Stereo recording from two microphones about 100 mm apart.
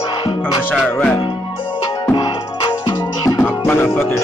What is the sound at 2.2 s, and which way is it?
Music, 45° left (ahead or behind).